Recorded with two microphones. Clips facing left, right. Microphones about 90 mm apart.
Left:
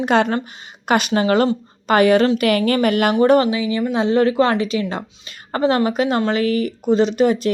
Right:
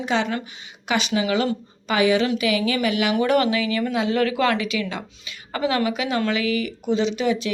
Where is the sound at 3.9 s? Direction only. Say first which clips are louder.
Left 7 dB; 30° left (ahead or behind).